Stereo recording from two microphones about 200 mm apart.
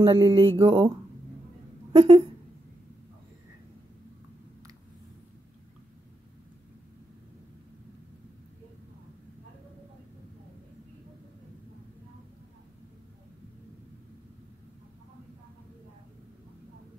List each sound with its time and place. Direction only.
0.0 s speech: 20° right (ahead or behind)